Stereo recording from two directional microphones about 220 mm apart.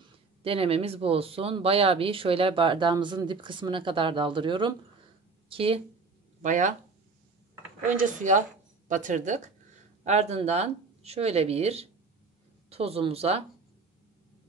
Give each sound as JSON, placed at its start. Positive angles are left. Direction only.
{"t": 0.4, "sound": "speech", "side_deg": -25}
{"t": 7.9, "sound": "speech", "side_deg": -35}